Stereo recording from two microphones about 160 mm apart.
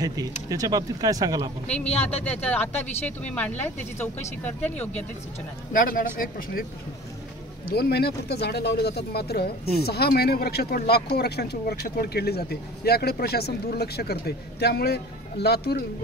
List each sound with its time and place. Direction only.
0.0 s speech: 20° right (ahead or behind)
1.9 s speech: 40° left (ahead or behind)
2.4 s speech: 10° left (ahead or behind)
5.7 s speech: 60° left (ahead or behind)
7.6 s speech: 75° left (ahead or behind)